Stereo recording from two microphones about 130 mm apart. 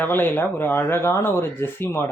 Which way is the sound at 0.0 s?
15° left (ahead or behind).